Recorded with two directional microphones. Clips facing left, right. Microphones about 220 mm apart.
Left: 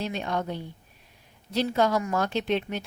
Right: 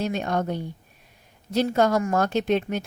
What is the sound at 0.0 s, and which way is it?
A woman's voice, 45° right (ahead or behind).